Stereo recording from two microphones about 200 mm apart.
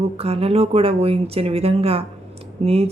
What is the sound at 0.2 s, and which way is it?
Speech, 30° right (ahead or behind).